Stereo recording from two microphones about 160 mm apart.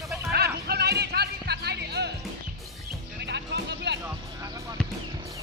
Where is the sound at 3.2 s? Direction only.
90° right.